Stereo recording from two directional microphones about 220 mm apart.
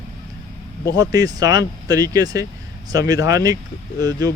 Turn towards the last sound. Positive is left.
turn(degrees=-15)  # may be behind; listen again after turning